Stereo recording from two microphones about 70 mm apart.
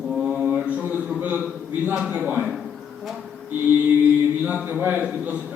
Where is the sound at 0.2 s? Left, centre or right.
Centre.